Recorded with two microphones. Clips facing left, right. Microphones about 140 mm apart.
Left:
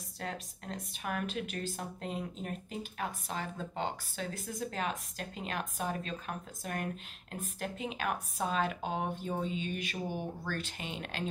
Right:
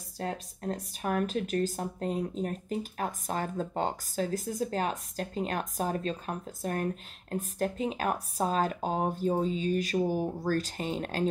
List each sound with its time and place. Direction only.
0.2 s speech: 35° right (ahead or behind)